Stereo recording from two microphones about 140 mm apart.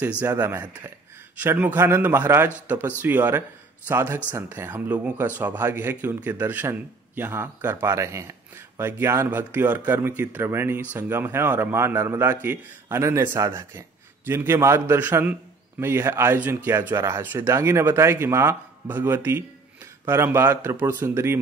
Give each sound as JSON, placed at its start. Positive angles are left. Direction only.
{"t": 0.2, "sound": "speech", "side_deg": -15}